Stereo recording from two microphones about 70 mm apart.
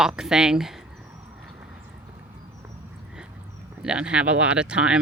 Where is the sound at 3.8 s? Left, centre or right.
Centre.